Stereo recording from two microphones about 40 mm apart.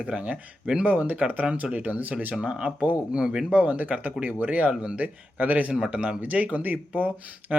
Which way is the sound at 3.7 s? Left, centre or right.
Right.